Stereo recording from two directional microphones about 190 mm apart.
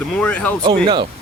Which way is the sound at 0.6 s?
25° right (ahead or behind).